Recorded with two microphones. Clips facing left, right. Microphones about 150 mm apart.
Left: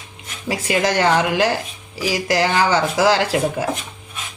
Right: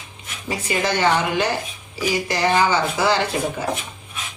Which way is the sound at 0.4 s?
85° left.